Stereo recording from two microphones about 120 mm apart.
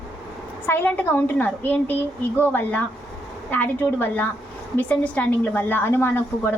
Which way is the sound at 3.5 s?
15° left (ahead or behind).